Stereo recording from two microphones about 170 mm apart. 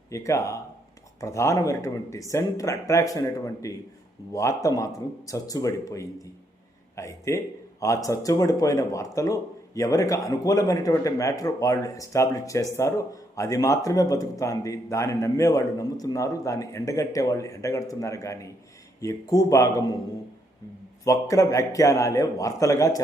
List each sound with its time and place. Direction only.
0.1 s speech: 15° left (ahead or behind)
21.0 s speech: 20° left (ahead or behind)